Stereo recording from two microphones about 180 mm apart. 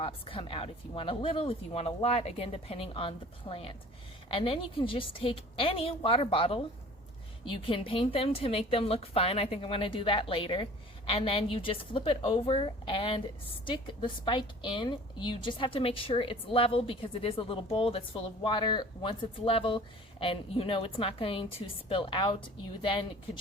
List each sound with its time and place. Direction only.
0.0 s a woman's voice: 30° left (ahead or behind)